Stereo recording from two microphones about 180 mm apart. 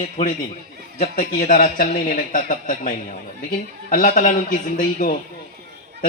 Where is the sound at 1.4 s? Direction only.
45° left (ahead or behind).